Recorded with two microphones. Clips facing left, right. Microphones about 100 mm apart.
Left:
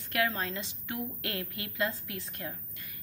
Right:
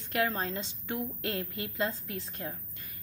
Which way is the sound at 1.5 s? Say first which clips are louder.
Right 1 dB; 30° right (ahead or behind).